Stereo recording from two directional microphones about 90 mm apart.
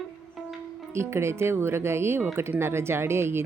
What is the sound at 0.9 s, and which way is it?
Speech, 30° right (ahead or behind).